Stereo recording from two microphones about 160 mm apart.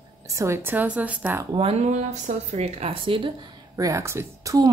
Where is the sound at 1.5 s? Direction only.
40° right (ahead or behind).